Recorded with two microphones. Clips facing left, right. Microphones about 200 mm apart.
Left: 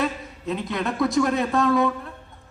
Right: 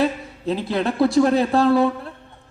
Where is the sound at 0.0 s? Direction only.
30° right (ahead or behind).